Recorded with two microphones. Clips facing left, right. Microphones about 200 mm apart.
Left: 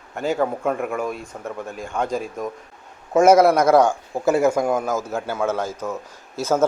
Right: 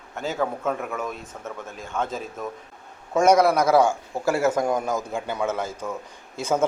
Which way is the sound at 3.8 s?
15° left (ahead or behind).